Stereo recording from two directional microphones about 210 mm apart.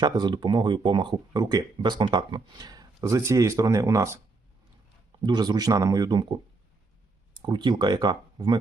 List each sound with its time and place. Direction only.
0.0 s speech: 20° right (ahead or behind)
5.2 s speech: 20° right (ahead or behind)
7.4 s speech: 20° right (ahead or behind)